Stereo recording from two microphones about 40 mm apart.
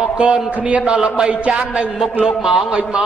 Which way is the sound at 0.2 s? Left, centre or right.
Right.